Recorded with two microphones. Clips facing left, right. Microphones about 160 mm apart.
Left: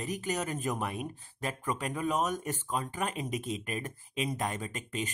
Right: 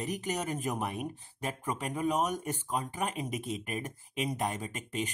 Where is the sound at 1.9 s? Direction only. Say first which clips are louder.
Right 2 dB; 15° right (ahead or behind).